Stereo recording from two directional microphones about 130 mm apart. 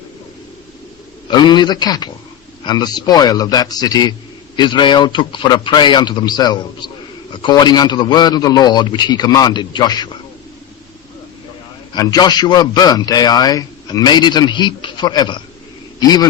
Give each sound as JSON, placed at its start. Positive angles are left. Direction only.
{"t": 1.3, "sound": "a man's voice", "side_deg": 35}
{"t": 11.9, "sound": "a man's voice", "side_deg": 30}